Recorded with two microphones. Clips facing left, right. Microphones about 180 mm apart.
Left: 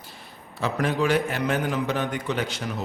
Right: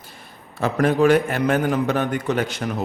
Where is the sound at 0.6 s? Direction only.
50° right (ahead or behind).